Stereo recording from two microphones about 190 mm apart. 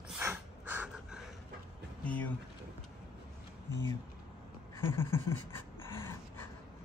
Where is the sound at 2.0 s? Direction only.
10° left (ahead or behind).